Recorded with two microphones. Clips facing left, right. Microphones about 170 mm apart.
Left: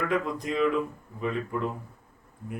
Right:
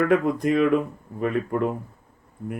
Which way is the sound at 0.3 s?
55° right (ahead or behind).